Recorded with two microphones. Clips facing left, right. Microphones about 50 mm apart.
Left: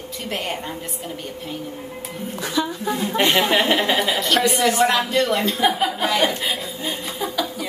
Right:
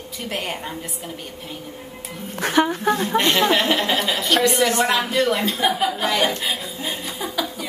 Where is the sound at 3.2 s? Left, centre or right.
Centre.